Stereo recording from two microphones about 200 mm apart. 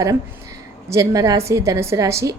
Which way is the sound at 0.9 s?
15° right (ahead or behind).